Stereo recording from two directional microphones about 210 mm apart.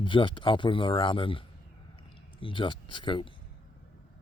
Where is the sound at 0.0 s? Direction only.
25° left (ahead or behind).